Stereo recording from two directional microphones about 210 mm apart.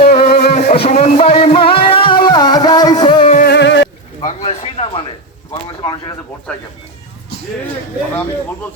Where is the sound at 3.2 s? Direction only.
35° left (ahead or behind).